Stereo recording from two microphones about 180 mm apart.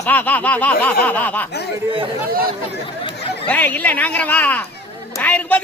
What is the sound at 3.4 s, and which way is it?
A man's voice, 10° left (ahead or behind).